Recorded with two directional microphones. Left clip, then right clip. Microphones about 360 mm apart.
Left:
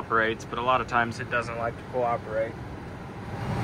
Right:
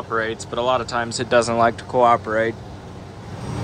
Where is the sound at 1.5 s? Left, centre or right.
Right.